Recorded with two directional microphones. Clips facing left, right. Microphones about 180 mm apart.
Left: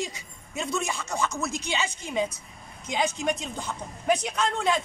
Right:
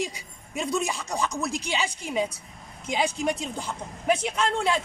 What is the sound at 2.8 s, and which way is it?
Speech, 10° right (ahead or behind).